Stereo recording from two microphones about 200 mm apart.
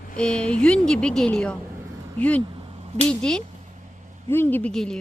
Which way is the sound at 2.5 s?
30° right (ahead or behind).